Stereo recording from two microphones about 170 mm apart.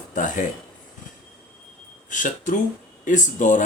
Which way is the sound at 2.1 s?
50° left (ahead or behind).